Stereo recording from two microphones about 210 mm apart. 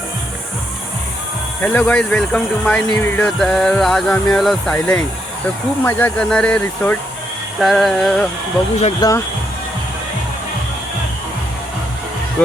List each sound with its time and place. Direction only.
1.6 s speech: 5° left (ahead or behind)
9.0 s speech: 15° left (ahead or behind)